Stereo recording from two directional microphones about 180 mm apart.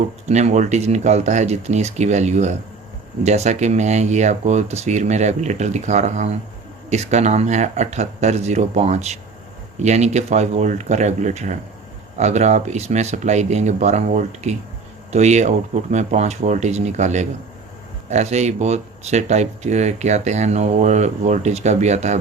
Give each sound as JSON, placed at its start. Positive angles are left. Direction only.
{"t": 0.3, "sound": "speech", "side_deg": -40}